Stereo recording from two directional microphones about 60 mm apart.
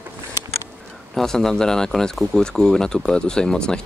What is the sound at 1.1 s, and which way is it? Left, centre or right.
Speech, centre.